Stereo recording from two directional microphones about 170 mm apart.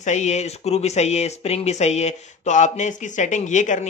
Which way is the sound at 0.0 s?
45° left (ahead or behind).